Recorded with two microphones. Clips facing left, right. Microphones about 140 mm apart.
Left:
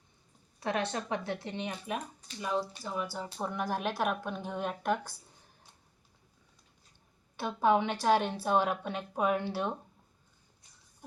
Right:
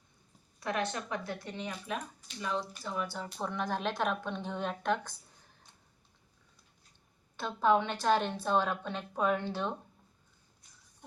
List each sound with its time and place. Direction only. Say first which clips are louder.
0.6 s speech: left 2 dB; 30° left (ahead or behind)
2.4 s speech: left 2 dB; 10° left (ahead or behind)
7.3 s speech: left 1 dB; 15° left (ahead or behind)